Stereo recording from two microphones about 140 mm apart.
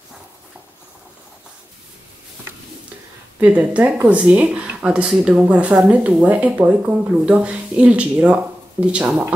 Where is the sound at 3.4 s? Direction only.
10° right (ahead or behind).